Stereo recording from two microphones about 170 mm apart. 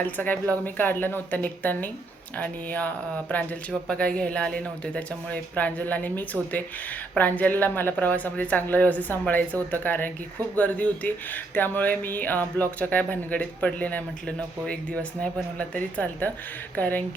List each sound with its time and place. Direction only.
0.0 s speech: 10° left (ahead or behind)